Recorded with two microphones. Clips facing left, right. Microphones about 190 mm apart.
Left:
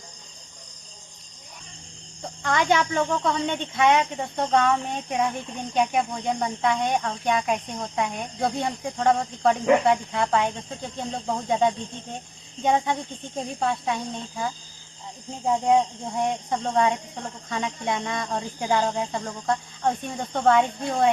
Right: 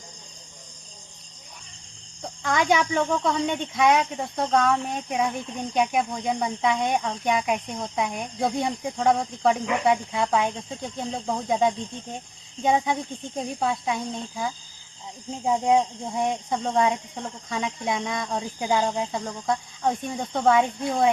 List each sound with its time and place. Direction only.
2.2 s speech: centre (ahead or behind)